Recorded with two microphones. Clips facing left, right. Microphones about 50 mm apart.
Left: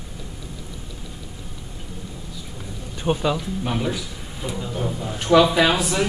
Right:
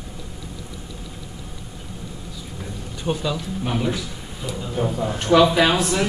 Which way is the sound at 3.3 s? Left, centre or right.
Centre.